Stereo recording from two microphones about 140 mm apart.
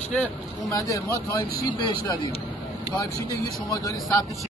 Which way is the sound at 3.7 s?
25° left (ahead or behind).